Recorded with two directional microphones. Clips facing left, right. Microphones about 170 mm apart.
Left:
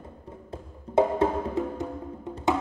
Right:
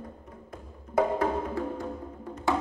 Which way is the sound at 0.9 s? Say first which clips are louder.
Left 3 dB; 25° left (ahead or behind).